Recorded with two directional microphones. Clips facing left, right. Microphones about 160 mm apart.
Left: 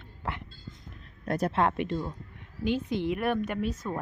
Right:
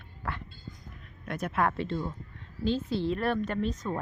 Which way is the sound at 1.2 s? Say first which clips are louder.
Left 3 dB; 35° left (ahead or behind).